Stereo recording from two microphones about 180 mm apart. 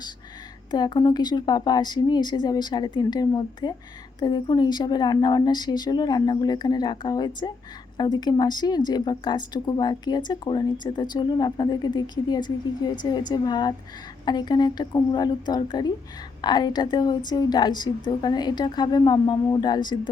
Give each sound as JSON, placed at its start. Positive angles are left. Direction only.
{"t": 0.7, "sound": "a woman's voice", "side_deg": 25}